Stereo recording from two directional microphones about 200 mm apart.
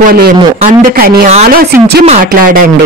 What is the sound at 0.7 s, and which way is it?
Speech, 45° right (ahead or behind).